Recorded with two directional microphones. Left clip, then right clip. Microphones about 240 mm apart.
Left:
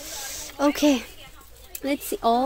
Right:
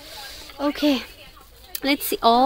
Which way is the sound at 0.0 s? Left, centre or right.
Centre.